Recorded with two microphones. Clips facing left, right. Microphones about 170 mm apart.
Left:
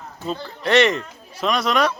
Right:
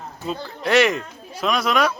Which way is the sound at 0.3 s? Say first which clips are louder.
Left 1 dB; 5° right (ahead or behind).